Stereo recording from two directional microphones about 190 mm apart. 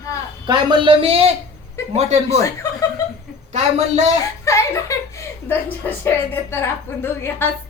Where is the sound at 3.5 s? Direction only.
35° right (ahead or behind).